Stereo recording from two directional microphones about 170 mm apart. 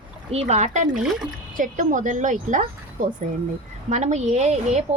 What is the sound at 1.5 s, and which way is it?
Speech, 50° right (ahead or behind).